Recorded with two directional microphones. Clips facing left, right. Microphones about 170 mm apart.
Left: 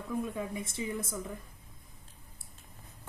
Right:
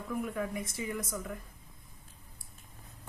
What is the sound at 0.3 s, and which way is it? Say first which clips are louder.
Speech: right 1 dB; 25° left (ahead or behind).